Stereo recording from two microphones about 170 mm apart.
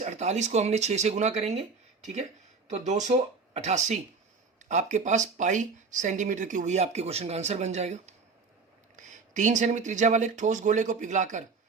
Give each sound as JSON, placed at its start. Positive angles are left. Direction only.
{"t": 0.0, "sound": "speech", "side_deg": -45}